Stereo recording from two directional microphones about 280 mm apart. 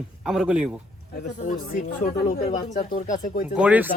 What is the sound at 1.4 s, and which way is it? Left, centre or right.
Speech, left.